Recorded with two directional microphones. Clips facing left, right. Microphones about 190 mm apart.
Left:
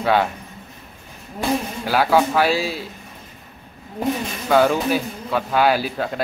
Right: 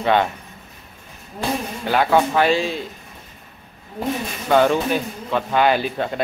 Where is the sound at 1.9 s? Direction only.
5° left (ahead or behind).